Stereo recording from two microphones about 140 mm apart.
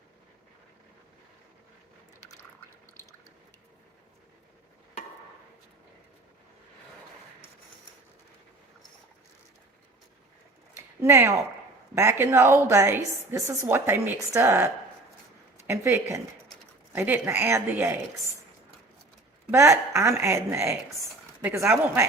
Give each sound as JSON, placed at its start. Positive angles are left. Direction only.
{"t": 10.8, "sound": "a sound", "side_deg": -15}
{"t": 11.9, "sound": "a woman's voice", "side_deg": -20}
{"t": 19.5, "sound": "speech", "side_deg": -20}